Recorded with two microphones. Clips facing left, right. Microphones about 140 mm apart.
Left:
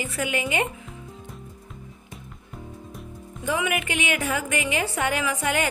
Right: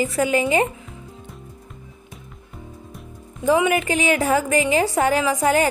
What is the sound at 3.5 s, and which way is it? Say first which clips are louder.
Speech: right 8 dB; 35° right (ahead or behind).